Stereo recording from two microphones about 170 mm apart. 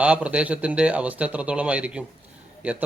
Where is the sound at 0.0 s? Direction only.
5° right (ahead or behind).